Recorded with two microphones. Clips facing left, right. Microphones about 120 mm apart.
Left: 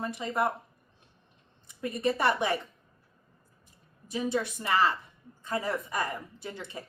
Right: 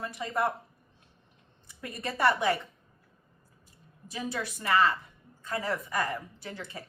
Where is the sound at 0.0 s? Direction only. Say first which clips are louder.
Left 2 dB; 25° left (ahead or behind).